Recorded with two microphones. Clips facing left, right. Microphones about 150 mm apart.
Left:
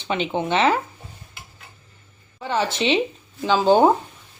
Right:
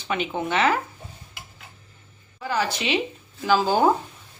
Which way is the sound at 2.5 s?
25° left (ahead or behind).